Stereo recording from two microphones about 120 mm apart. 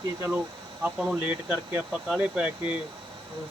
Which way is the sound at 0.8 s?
10° right (ahead or behind).